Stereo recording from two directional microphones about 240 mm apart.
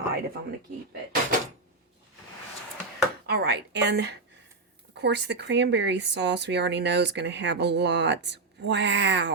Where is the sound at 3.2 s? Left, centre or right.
Right.